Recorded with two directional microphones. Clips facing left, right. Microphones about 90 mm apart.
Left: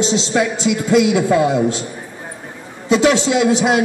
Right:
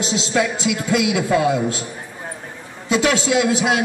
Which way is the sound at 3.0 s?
30° left (ahead or behind).